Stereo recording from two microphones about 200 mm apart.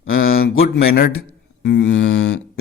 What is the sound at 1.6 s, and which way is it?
Speech, 60° left (ahead or behind).